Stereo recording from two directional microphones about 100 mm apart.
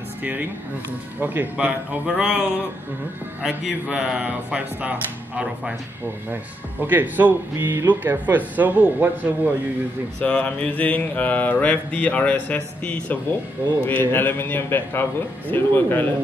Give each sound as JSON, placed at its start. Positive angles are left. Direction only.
{"t": 0.2, "sound": "speech", "side_deg": -15}
{"t": 3.4, "sound": "speech", "side_deg": -5}
{"t": 10.2, "sound": "mantra", "side_deg": 15}
{"t": 13.8, "sound": "a man's voice", "side_deg": 20}